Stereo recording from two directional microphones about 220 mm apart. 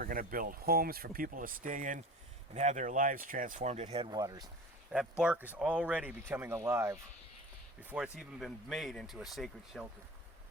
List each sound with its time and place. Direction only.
0.0 s speech: 40° right (ahead or behind); by 4.4 s 15° right (ahead or behind)
4.9 s speech: 5° right (ahead or behind)